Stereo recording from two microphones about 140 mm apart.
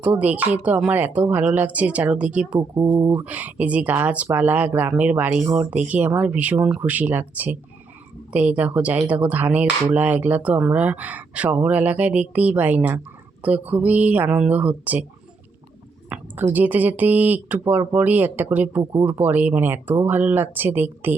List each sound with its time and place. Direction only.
0.0 s speech: 10° right (ahead or behind)
2.6 s speech: 30° right (ahead or behind)
3.1 s speech: 15° right (ahead or behind)
16.0 s speech: 10° right (ahead or behind)